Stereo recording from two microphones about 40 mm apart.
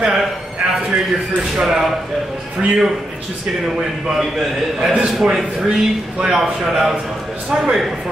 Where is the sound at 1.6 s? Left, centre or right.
Centre.